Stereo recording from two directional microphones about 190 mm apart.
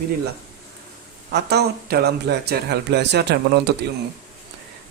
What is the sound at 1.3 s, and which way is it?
Speech, 60° right (ahead or behind).